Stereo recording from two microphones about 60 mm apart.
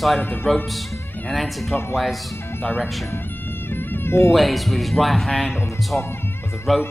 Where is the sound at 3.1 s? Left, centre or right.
Left.